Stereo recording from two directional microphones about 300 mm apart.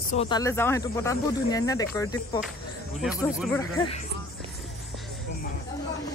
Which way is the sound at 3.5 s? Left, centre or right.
Centre.